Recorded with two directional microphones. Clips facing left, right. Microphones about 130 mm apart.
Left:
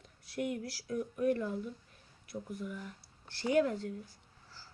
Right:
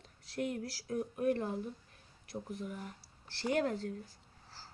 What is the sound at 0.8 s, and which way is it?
Speech, 50° right (ahead or behind).